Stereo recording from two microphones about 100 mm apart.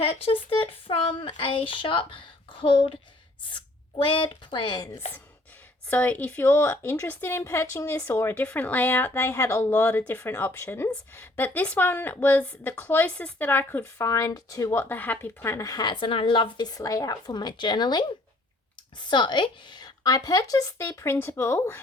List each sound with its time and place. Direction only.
0.0 s speech: 75° left (ahead or behind); by 4.9 s 55° left (ahead or behind)
5.9 s a woman's voice: 15° left (ahead or behind); by 14.7 s 35° left (ahead or behind)
14.7 s a woman's voice: 20° left (ahead or behind); by 15.9 s 35° left (ahead or behind)
15.9 s speech: 60° left (ahead or behind)
16.6 s a woman's voice: 40° left (ahead or behind)